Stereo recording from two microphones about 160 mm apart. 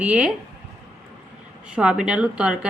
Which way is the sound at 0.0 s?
5° right (ahead or behind).